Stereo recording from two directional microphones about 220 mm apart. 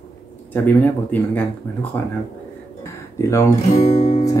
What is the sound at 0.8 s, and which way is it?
Speech, 10° left (ahead or behind).